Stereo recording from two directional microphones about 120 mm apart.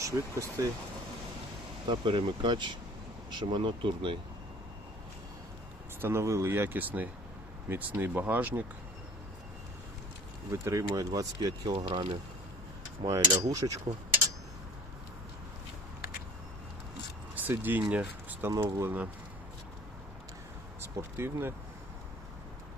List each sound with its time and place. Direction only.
0.0 s speech: 25° right (ahead or behind)
1.9 s speech: 45° right (ahead or behind)
6.0 s speech: 20° right (ahead or behind)
10.5 s speech: 25° right (ahead or behind); by 12.0 s 40° right (ahead or behind)
13.1 s speech: 30° right (ahead or behind)
17.3 s speech: 15° right (ahead or behind)
20.8 s speech: 20° right (ahead or behind)